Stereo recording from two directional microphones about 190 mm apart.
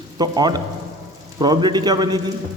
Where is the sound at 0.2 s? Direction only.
20° right (ahead or behind).